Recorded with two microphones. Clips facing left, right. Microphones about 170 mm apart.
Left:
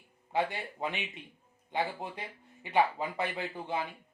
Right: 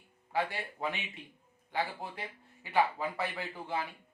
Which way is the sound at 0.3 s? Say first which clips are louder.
Left 2 dB; 20° left (ahead or behind).